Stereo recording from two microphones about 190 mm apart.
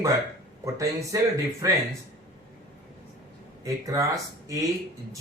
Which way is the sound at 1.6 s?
15° right (ahead or behind).